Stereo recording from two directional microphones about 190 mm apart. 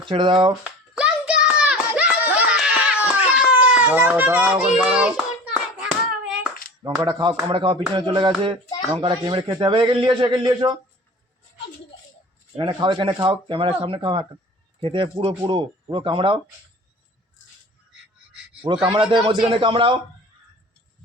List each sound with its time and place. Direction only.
0.0 s a man's voice: 25° right (ahead or behind)
0.9 s a sound: 5° right (ahead or behind)
3.2 s speech: 5° right (ahead or behind)
5.8 s hands: 5° right (ahead or behind)
7.1 s a man's voice: 25° right (ahead or behind)
12.5 s a man's voice: 25° right (ahead or behind)
18.9 s a man's voice: 25° right (ahead or behind)